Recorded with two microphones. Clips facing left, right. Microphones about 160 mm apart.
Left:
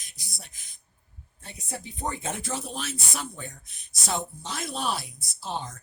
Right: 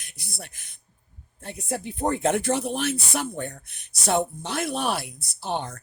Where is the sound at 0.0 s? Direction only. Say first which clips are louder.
Right 7 dB; 60° right (ahead or behind).